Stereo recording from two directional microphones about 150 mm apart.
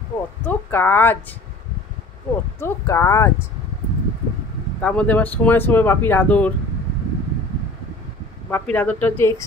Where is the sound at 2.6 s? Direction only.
20° left (ahead or behind).